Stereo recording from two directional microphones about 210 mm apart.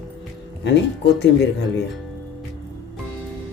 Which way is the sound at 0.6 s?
55° left (ahead or behind).